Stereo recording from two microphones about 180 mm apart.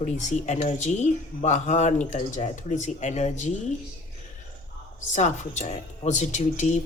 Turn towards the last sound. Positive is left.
turn(degrees=40)  # may be behind; listen again after turning